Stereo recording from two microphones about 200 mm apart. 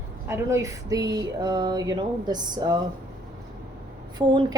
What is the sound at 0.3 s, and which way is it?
Speech, 15° right (ahead or behind).